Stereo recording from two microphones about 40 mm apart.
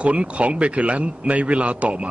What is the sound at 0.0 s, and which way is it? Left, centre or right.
A man's voice, right.